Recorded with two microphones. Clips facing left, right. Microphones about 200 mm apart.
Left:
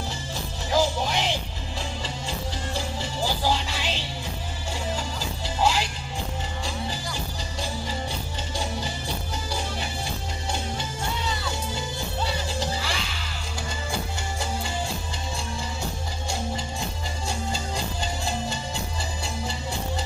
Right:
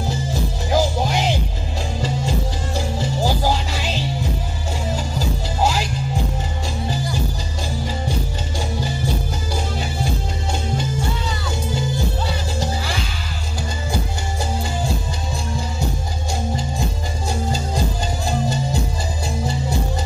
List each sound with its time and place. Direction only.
0.0 s music: 40° right (ahead or behind)
5.6 s music: 40° right (ahead or behind)
17.3 s music: 40° right (ahead or behind)